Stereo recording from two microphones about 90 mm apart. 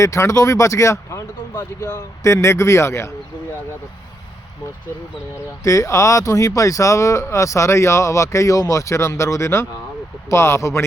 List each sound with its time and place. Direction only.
0.0 s speech: 35° left (ahead or behind)
5.6 s speech: 35° left (ahead or behind)